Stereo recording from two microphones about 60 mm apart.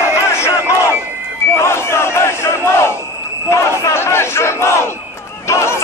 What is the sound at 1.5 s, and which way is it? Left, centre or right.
Battle cry, left.